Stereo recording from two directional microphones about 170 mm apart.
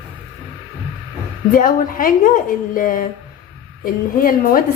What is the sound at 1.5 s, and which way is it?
A woman's voice, 55° left (ahead or behind).